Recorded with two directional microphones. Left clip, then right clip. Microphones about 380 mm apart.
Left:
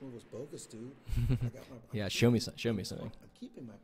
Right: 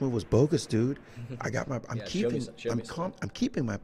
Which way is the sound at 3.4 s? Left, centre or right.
Right.